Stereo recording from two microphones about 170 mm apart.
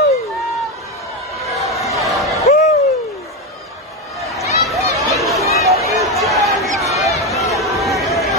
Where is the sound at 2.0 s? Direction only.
Centre (ahead or behind).